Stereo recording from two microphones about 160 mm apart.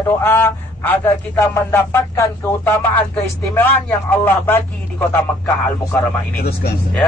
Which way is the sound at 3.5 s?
15° left (ahead or behind).